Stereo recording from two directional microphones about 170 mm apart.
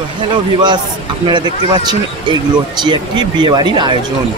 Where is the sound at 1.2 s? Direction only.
25° right (ahead or behind).